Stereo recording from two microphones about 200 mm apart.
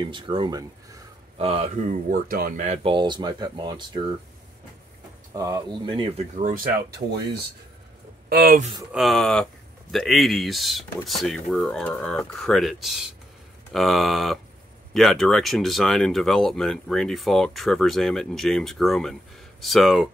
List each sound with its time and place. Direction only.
0.0 s speech: 25° right (ahead or behind)
1.4 s speech: 30° right (ahead or behind)
5.3 s speech: 15° right (ahead or behind)
6.3 s speech: 40° right (ahead or behind)
8.3 s speech: 50° right (ahead or behind)
8.9 s speech: centre (ahead or behind)